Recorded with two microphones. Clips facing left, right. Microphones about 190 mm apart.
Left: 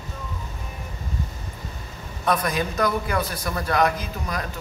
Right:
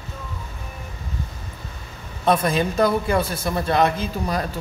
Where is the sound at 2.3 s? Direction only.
25° right (ahead or behind).